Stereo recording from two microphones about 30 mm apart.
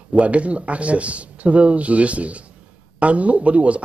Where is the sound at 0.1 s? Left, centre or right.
Right.